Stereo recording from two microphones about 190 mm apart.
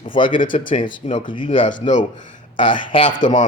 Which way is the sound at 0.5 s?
25° left (ahead or behind).